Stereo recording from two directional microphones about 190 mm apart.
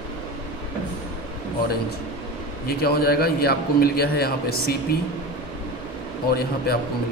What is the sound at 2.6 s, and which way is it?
A man's voice, 55° left (ahead or behind).